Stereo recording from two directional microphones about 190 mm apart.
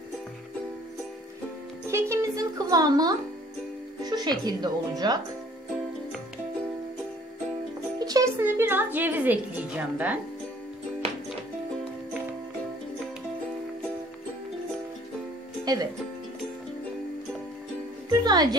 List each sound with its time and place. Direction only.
1.9 s speech: 15° right (ahead or behind)
8.0 s speech: 20° right (ahead or behind)
15.6 s music: 20° right (ahead or behind)
18.2 s speech: 20° right (ahead or behind)